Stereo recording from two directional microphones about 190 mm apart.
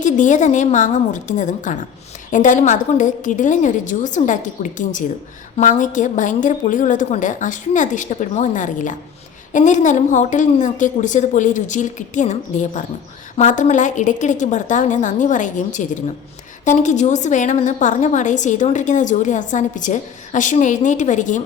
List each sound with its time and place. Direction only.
0.0 s a woman's voice: 40° left (ahead or behind)